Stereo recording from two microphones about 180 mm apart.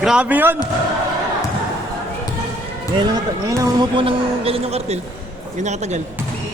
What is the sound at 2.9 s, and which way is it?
A man's voice, 25° right (ahead or behind).